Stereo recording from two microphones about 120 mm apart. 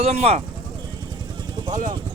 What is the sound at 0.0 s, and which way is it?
Speech, 60° right (ahead or behind).